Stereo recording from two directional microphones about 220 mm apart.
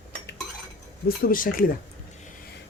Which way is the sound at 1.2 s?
40° left (ahead or behind).